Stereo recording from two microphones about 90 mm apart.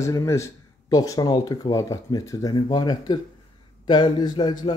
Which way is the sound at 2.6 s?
50° left (ahead or behind).